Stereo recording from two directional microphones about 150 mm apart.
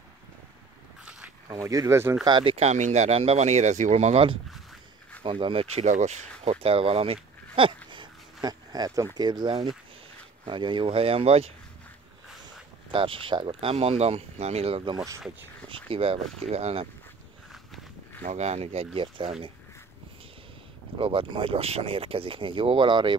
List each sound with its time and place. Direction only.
1.5 s speech: 20° right (ahead or behind)
2.2 s speech: 35° right (ahead or behind)
12.9 s speech: 35° right (ahead or behind)
18.2 s speech: 50° right (ahead or behind)
21.0 s speech: 35° right (ahead or behind)